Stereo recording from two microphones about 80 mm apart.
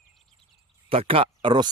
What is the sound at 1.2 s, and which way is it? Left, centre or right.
Speech, right.